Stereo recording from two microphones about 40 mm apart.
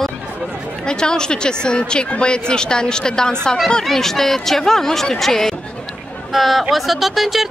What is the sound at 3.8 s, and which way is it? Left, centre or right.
A woman's voice, centre.